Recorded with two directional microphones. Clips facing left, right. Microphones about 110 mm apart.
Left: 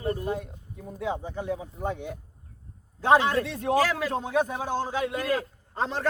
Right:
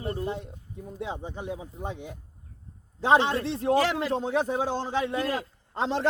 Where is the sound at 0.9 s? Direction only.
25° right (ahead or behind).